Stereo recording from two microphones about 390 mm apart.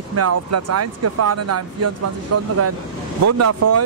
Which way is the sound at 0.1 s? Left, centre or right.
Right.